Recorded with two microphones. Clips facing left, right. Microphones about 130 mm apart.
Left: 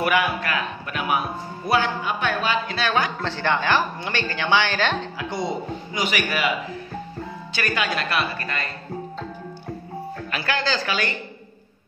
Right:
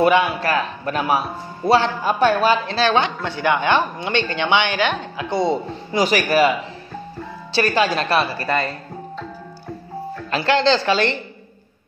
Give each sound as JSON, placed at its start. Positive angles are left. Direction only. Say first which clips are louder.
{"t": 0.0, "sound": "speech", "louder": "right 6 dB", "side_deg": -25}
{"t": 3.3, "sound": "a woman's voice", "louder": "right 4 dB", "side_deg": -15}
{"t": 5.9, "sound": "speech", "louder": "right 9 dB", "side_deg": -40}
{"t": 7.5, "sound": "speech", "louder": "right 7 dB", "side_deg": -30}
{"t": 10.3, "sound": "a woman's voice", "louder": "right 9 dB", "side_deg": -25}